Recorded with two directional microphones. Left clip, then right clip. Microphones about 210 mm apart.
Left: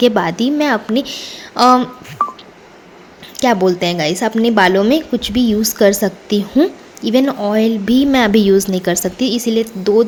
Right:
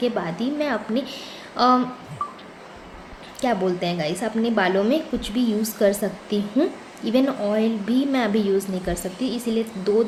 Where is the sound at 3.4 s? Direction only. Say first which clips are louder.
Left 9 dB; 40° left (ahead or behind).